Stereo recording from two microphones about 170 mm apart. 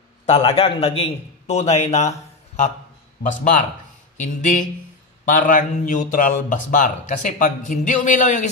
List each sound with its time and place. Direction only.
0.3 s a man's voice: 35° left (ahead or behind)